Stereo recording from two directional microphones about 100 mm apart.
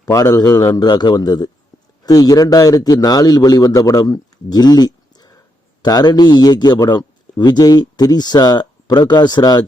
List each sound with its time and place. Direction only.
0.0 s a man's voice: 35° left (ahead or behind)